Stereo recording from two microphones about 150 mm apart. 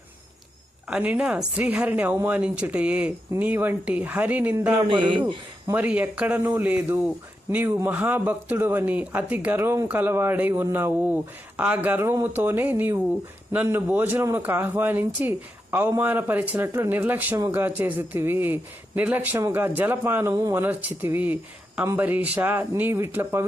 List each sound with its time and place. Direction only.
0.9 s a man's voice: 10° right (ahead or behind)
4.9 s a man's voice: 35° right (ahead or behind)
5.7 s a man's voice: 10° right (ahead or behind)